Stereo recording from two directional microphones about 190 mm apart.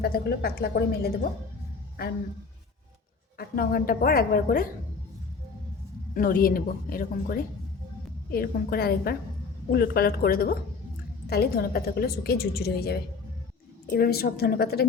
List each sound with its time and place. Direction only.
0.0 s a woman's voice: 55° left (ahead or behind)
3.3 s a woman's voice: 50° left (ahead or behind)
6.1 s a woman's voice: 50° left (ahead or behind)